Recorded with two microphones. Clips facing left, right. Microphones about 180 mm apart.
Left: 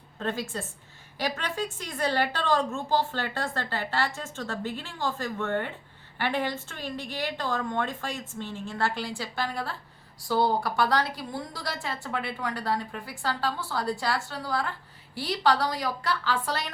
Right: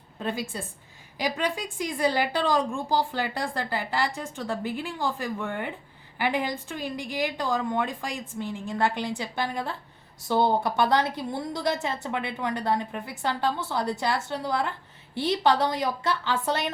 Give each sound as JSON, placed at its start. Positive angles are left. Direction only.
{"t": 0.2, "sound": "a woman's voice", "side_deg": -10}